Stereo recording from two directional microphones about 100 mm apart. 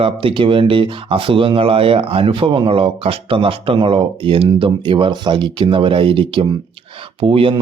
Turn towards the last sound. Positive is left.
turn(degrees=-70)  # may be behind; listen again after turning